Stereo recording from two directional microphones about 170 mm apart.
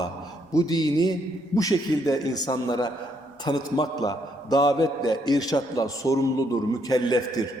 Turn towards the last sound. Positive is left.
turn(degrees=25)  # may be behind; listen again after turning